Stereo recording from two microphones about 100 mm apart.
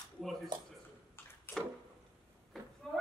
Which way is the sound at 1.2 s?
20° left (ahead or behind).